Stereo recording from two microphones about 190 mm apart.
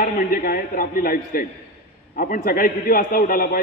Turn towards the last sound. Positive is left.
turn(degrees=50)  # may be behind; listen again after turning